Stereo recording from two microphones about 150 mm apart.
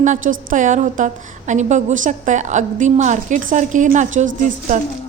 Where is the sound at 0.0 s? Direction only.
55° right (ahead or behind).